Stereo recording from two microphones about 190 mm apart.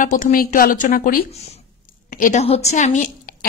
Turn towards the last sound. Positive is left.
turn(degrees=40)  # may be behind; listen again after turning